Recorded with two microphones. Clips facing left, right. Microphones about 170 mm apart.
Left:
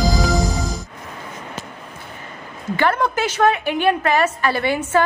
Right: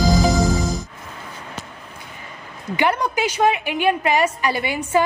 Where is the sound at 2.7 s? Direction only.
15° right (ahead or behind).